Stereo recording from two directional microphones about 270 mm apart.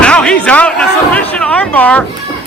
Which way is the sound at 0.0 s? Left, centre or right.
Centre.